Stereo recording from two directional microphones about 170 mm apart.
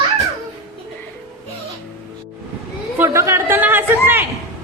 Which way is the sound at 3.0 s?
15° right (ahead or behind).